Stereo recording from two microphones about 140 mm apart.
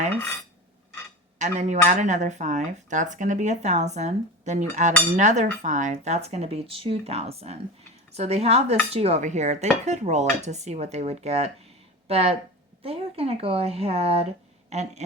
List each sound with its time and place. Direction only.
1.4 s speech: 55° right (ahead or behind)
5.1 s dishes: 60° right (ahead or behind)